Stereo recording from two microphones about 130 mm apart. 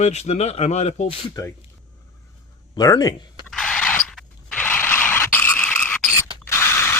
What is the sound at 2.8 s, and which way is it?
Speech, 30° left (ahead or behind).